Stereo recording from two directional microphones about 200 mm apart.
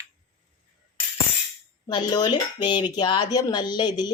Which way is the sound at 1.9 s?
20° left (ahead or behind).